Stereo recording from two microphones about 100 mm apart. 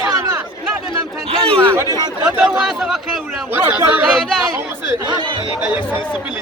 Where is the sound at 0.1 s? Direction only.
35° right (ahead or behind).